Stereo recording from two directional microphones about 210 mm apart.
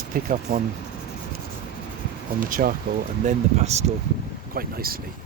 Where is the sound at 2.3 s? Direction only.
40° right (ahead or behind).